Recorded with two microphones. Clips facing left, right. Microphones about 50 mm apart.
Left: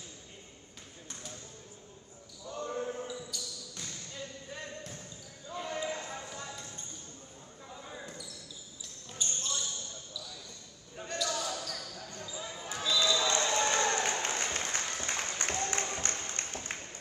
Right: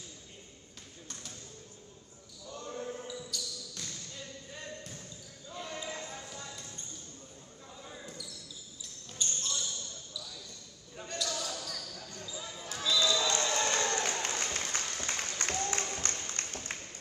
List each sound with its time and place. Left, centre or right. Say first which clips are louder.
2.5 s basketball bounce: left 4 dB; left
3.1 s basketball bounce: even; centre
5.5 s basketball bounce: left 4 dB; centre
7.8 s basketball bounce: left 1 dB; left
9.2 s basketball bounce: even; centre
11.2 s basketball bounce: left 4 dB; left
12.9 s a sound: even; left